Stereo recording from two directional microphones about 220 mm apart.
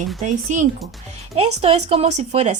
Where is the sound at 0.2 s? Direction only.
35° right (ahead or behind).